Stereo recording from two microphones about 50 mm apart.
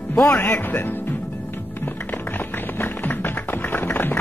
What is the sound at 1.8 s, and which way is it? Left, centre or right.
Music, left.